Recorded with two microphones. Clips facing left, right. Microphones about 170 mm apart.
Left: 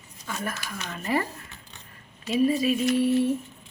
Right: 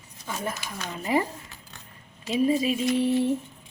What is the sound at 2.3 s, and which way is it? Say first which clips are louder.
Speech: left 1 dB; 20° right (ahead or behind).